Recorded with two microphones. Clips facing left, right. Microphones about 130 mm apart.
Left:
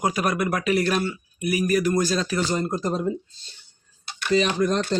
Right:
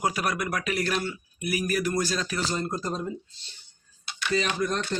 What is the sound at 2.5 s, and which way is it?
Speech, 20° left (ahead or behind).